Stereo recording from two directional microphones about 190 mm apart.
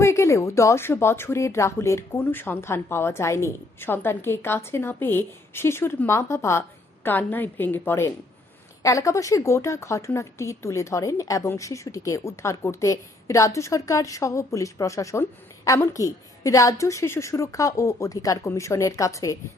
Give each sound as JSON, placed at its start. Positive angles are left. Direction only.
{"t": 0.0, "sound": "speech", "side_deg": 15}